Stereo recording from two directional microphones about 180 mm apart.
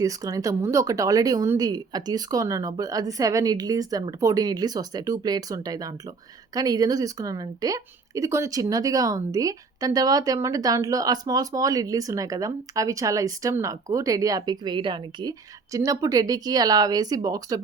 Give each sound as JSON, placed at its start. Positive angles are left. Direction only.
{"t": 0.0, "sound": "speech", "side_deg": -20}